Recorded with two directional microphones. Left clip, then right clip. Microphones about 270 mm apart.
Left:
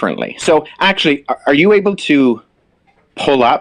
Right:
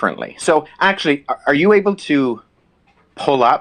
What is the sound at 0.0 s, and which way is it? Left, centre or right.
Speech, left.